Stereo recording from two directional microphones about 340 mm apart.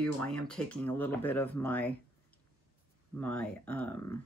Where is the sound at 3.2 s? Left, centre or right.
Centre.